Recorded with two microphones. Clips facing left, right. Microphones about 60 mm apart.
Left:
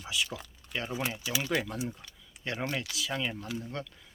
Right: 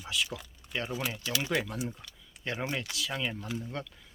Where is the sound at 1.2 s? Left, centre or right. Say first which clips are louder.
Even; centre.